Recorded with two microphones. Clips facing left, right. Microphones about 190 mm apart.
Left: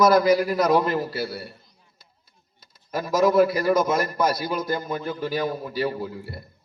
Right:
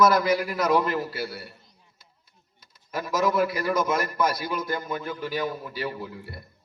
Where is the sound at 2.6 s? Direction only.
35° left (ahead or behind).